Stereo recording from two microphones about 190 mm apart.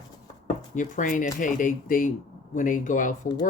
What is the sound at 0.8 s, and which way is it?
Speech, 40° left (ahead or behind).